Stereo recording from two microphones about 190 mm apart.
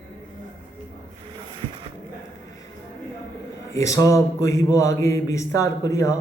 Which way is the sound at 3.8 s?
15° left (ahead or behind).